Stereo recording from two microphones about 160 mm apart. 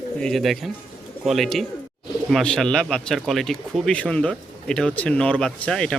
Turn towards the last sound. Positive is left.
turn(degrees=5)  # may be behind; listen again after turning